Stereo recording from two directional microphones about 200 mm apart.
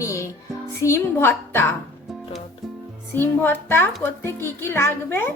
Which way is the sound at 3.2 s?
10° left (ahead or behind).